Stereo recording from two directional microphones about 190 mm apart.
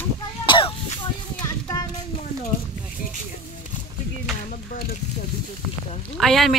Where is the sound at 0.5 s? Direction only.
25° left (ahead or behind).